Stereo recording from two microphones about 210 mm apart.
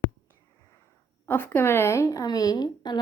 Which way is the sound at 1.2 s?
10° left (ahead or behind).